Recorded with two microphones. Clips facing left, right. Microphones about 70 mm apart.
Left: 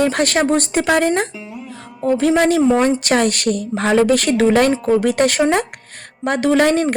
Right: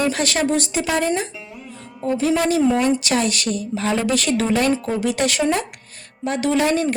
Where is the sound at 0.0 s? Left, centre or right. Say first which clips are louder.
Left 4 dB; left.